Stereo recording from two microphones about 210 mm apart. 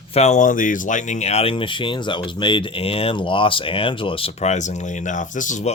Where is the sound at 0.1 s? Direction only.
30° left (ahead or behind).